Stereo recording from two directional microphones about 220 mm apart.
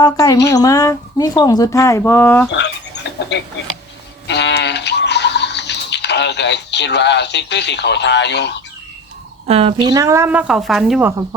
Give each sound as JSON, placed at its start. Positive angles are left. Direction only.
{"t": 0.0, "sound": "speech", "side_deg": 15}
{"t": 2.5, "sound": "a sound", "side_deg": 50}
{"t": 4.3, "sound": "goat", "side_deg": 50}
{"t": 9.5, "sound": "speech", "side_deg": -25}